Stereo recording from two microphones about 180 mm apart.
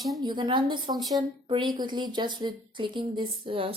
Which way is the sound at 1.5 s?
25° right (ahead or behind).